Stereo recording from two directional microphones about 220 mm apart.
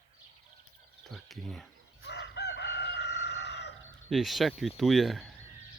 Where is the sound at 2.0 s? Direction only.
50° left (ahead or behind).